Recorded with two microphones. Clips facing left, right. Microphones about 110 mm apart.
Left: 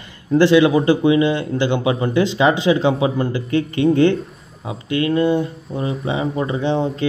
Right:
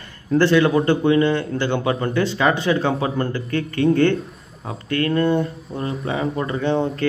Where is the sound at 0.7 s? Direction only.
Centre (ahead or behind).